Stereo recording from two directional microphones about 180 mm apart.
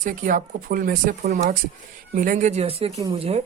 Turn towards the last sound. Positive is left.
turn(degrees=-35)  # may be behind; listen again after turning